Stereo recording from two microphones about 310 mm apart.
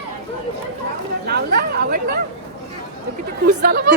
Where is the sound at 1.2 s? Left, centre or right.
Right.